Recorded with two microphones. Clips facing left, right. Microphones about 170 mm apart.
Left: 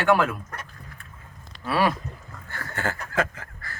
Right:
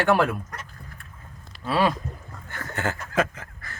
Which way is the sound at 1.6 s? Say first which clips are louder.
Right 1 dB; 20° right (ahead or behind).